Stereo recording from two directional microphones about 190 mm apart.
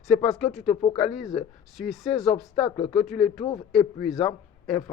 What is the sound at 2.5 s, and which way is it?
Speech, 30° left (ahead or behind).